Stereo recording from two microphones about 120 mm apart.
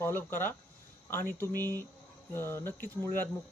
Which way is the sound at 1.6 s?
30° right (ahead or behind).